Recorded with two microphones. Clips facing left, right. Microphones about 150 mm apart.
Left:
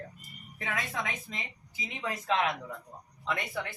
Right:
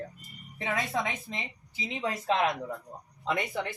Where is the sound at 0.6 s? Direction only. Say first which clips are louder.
Right 5 dB; 25° right (ahead or behind).